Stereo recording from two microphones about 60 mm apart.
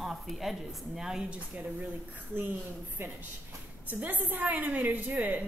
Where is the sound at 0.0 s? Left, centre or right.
Centre.